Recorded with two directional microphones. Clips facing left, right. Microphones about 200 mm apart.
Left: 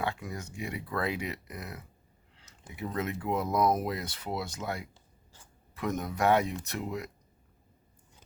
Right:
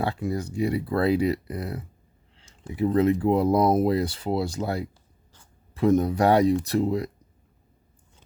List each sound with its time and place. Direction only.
0.0 s speech: 35° right (ahead or behind)